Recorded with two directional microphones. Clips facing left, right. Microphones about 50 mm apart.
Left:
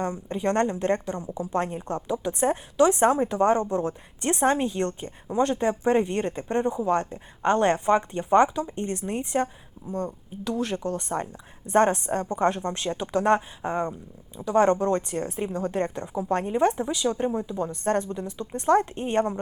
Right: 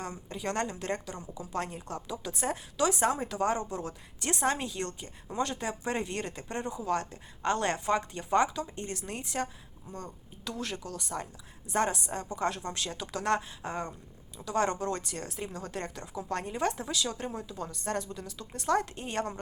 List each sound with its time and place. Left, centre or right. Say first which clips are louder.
0.0 s a woman's voice: left 9 dB; left